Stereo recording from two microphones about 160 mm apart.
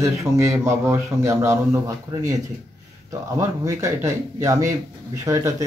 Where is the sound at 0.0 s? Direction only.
20° right (ahead or behind).